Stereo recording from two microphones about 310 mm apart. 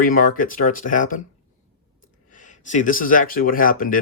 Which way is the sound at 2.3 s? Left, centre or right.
Left.